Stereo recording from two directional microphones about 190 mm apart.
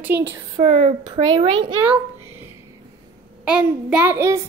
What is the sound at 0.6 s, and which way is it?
Speech, 35° right (ahead or behind).